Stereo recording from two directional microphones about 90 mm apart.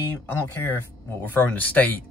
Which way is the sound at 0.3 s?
25° left (ahead or behind).